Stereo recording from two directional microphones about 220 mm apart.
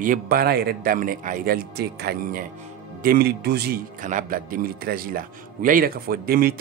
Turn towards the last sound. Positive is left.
turn(degrees=-45)  # may be behind; listen again after turning